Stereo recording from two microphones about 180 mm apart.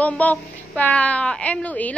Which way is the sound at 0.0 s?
10° left (ahead or behind).